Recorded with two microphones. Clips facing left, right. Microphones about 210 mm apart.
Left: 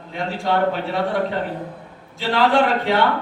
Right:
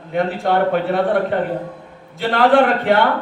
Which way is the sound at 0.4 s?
55° right (ahead or behind).